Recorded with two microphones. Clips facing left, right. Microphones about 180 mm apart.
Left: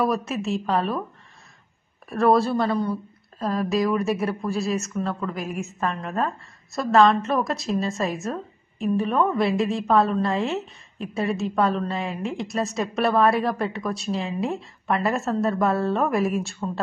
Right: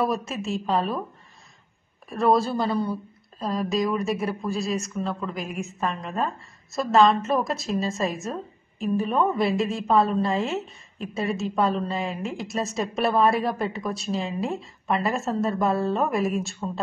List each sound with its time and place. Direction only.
0.4 s a woman's voice: centre (ahead or behind)
2.0 s a woman's voice: centre (ahead or behind)